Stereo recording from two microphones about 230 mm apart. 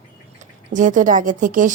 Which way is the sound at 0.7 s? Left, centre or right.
Right.